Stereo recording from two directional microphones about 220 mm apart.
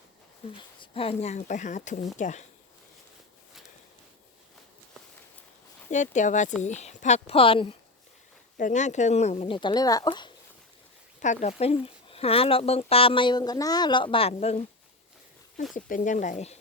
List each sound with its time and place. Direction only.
0.5 s speech: 25° left (ahead or behind)
5.9 s speech: 35° left (ahead or behind)
8.5 s speech: 35° left (ahead or behind)
11.2 s speech: 30° left (ahead or behind)
15.7 s speech: 35° left (ahead or behind)